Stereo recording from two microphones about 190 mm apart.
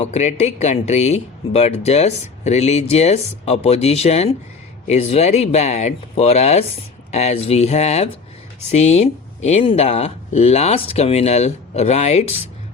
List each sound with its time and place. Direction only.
0.0 s speech: 35° left (ahead or behind)